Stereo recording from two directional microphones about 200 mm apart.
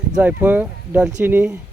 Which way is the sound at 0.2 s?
10° right (ahead or behind).